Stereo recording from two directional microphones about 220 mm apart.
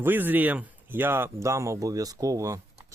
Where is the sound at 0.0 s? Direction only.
10° right (ahead or behind).